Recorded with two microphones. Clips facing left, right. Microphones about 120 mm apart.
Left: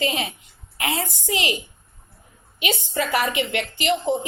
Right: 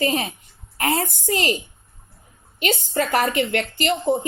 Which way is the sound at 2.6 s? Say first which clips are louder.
Right 3 dB; 50° right (ahead or behind).